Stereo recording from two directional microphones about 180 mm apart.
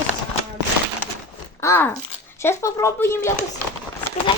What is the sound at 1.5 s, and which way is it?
Speech, 15° left (ahead or behind).